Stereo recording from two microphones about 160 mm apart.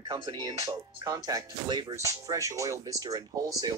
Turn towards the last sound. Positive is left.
turn(degrees=-20)  # may be behind; listen again after turning